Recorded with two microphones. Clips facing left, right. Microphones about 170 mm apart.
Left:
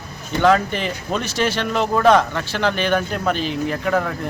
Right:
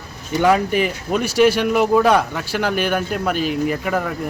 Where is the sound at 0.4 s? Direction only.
10° right (ahead or behind).